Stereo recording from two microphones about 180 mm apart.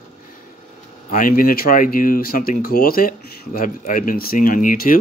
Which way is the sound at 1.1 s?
50° left (ahead or behind).